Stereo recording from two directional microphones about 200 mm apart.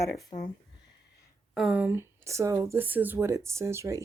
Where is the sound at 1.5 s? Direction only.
5° right (ahead or behind).